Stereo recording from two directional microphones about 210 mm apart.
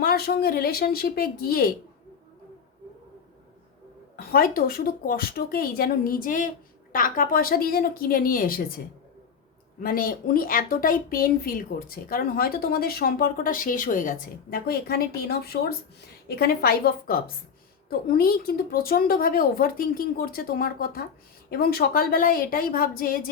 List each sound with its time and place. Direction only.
0.0 s speech: 45° left (ahead or behind)
4.2 s speech: 45° left (ahead or behind)
9.8 s speech: 45° left (ahead or behind)